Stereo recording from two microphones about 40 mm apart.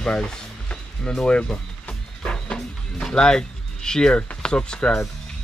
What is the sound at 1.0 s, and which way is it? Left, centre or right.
Music, left.